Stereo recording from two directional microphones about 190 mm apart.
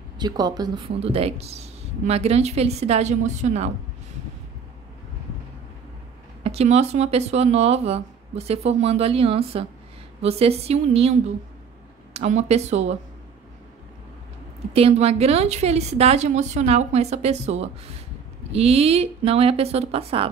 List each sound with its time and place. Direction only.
0.2 s speech: 20° right (ahead or behind); by 3.7 s 35° right (ahead or behind)
6.4 s speech: 35° right (ahead or behind)
14.7 s speech: 30° right (ahead or behind)